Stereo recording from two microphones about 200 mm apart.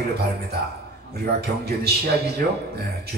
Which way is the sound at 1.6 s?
55° right (ahead or behind).